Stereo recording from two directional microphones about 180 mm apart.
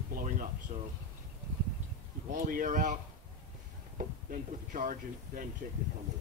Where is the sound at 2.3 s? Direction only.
50° right (ahead or behind).